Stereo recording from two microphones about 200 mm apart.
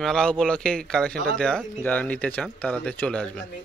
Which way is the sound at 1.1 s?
50° right (ahead or behind).